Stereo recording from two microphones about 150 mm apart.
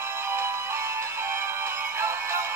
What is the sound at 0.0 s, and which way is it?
Music, 15° right (ahead or behind).